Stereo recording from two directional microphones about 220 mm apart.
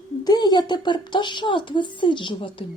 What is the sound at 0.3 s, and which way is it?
Speech, 20° left (ahead or behind).